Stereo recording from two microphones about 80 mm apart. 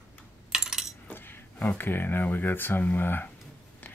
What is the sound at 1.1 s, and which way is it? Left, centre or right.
Speech, left.